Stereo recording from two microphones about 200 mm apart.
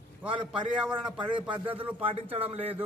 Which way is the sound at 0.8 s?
5° right (ahead or behind).